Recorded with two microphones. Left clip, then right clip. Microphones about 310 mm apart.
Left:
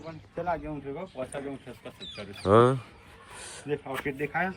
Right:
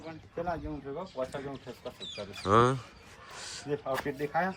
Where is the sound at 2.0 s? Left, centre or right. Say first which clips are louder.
Left 1 dB; right.